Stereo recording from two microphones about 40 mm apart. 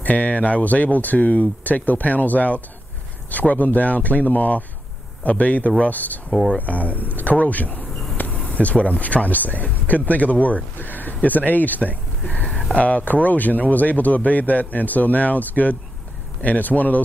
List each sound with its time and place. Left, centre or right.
0.0 s speech: left